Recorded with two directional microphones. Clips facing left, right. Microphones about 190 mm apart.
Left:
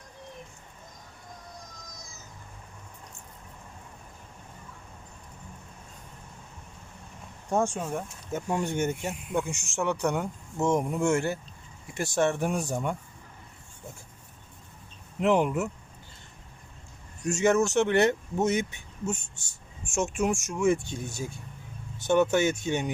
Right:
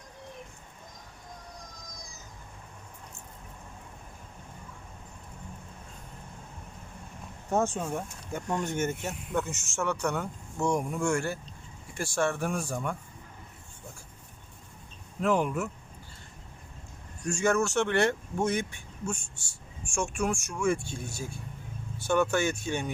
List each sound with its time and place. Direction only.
7.5 s speech: 15° left (ahead or behind)
15.2 s speech: 20° left (ahead or behind)
17.2 s speech: 20° left (ahead or behind)